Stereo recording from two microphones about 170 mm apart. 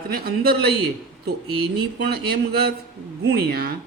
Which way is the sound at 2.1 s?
65° right (ahead or behind).